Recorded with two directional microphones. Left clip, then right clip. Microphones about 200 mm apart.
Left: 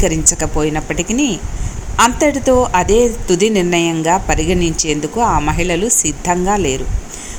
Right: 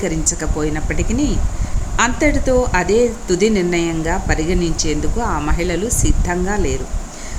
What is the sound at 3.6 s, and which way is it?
Speech, 20° left (ahead or behind).